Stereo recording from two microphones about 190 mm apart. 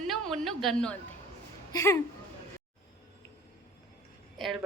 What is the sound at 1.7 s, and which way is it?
Speech, 15° left (ahead or behind).